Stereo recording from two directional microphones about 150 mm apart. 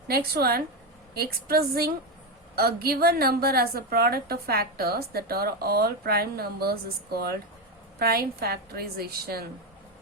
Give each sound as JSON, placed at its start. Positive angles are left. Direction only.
{"t": 0.1, "sound": "a woman's voice", "side_deg": -90}